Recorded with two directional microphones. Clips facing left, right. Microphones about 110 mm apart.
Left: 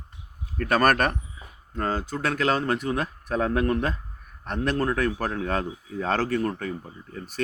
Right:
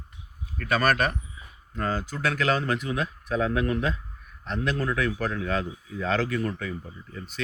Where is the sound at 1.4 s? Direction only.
35° left (ahead or behind).